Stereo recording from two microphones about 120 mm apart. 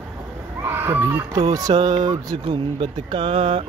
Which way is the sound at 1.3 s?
30° right (ahead or behind).